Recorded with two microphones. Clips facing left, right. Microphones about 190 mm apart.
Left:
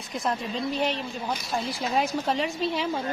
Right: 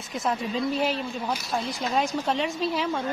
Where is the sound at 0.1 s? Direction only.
Centre (ahead or behind).